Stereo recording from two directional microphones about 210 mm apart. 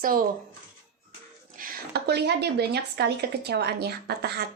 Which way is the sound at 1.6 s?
45° right (ahead or behind).